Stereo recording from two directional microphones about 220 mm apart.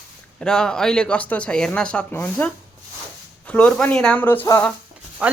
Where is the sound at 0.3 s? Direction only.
5° left (ahead or behind).